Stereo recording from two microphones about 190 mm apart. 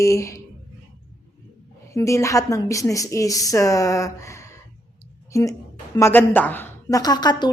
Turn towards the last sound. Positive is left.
turn(degrees=20)  # may be behind; listen again after turning